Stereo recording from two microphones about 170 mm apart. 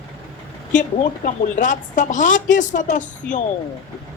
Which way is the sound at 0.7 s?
50° left (ahead or behind).